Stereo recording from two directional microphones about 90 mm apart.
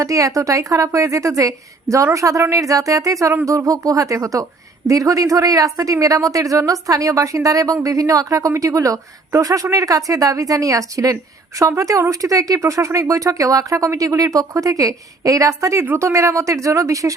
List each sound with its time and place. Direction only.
0.0 s speech: 40° right (ahead or behind)